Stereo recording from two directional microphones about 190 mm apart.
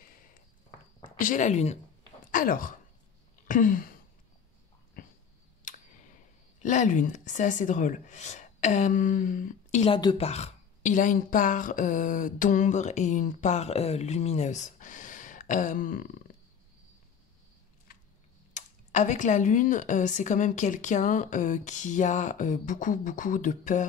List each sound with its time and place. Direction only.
1.1 s speech: 45° left (ahead or behind)
2.3 s speech: 45° left (ahead or behind)
3.4 s a sound: 45° left (ahead or behind)
6.6 s speech: 40° left (ahead or behind)
9.9 s speech: 25° left (ahead or behind); by 16.3 s 45° left (ahead or behind)
18.5 s speech: 40° left (ahead or behind)